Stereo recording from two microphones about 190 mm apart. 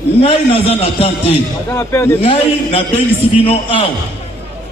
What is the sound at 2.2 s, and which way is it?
A man's voice, 30° left (ahead or behind).